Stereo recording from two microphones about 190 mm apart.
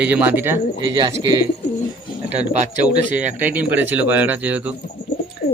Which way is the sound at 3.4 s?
10° right (ahead or behind).